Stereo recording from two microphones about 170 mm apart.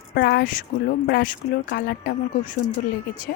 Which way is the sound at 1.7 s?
65° left (ahead or behind).